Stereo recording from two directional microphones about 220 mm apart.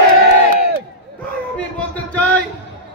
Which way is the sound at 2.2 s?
5° left (ahead or behind).